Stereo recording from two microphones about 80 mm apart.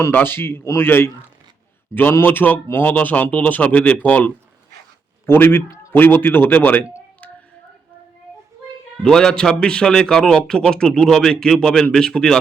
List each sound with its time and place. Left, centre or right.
0.1 s a man's voice: left
2.2 s speech: left
9.0 s a man's voice: centre